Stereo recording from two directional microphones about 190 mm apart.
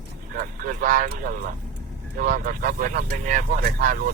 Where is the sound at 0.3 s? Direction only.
45° right (ahead or behind).